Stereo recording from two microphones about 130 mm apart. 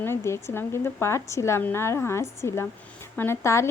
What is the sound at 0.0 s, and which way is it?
A woman's voice, 20° left (ahead or behind).